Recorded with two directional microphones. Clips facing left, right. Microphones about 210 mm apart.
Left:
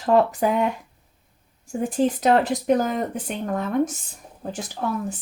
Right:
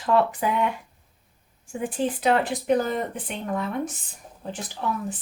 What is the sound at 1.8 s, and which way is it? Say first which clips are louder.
Speech: left 4 dB; 40° left (ahead or behind).